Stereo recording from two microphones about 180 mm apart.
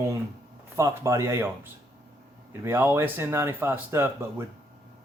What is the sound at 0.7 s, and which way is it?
Speech, 15° right (ahead or behind).